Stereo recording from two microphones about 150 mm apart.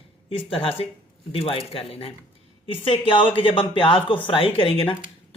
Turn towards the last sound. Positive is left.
turn(degrees=40)  # may be behind; listen again after turning